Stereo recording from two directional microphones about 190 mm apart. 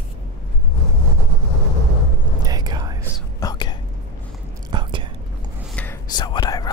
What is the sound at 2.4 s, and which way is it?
Whispering, 20° right (ahead or behind).